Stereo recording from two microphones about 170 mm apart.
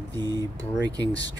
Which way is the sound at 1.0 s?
90° left.